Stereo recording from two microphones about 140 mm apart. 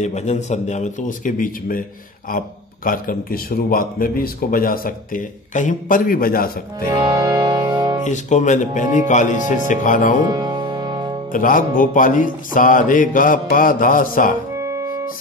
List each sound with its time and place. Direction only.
0.0 s speech: 55° left (ahead or behind); by 1.8 s 75° left (ahead or behind)
2.2 s a man's voice: 90° left
6.9 s music: 25° right (ahead or behind)
8.0 s speech: 60° left (ahead or behind)
10.2 s music: 30° right (ahead or behind)
11.3 s music: 75° left (ahead or behind)